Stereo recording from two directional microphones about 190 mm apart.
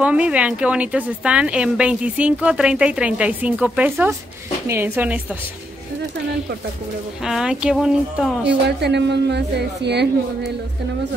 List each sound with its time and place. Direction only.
0.0 s a woman's voice: 5° right (ahead or behind)
7.2 s speech: 5° right (ahead or behind)
8.5 s speech: 60° right (ahead or behind)